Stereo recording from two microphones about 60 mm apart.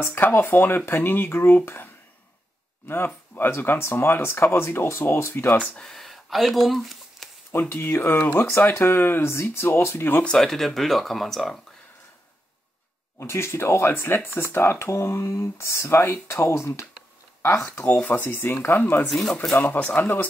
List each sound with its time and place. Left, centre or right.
0.0 s speech: left
3.3 s speech: left
5.8 s a sound: centre
7.6 s speech: left
10.2 s speech: centre
13.2 s speech: left
17.8 s speech: left
19.0 s speech: centre
19.8 s speech: left